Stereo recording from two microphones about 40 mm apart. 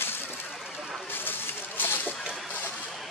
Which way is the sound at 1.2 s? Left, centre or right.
Left.